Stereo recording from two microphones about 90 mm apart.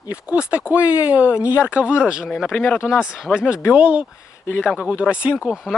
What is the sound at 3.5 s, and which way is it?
Speech, 30° left (ahead or behind).